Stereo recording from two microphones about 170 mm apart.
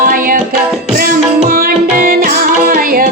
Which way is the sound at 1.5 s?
60° right (ahead or behind).